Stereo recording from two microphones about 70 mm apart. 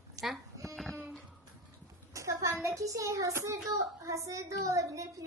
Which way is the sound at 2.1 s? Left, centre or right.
Right.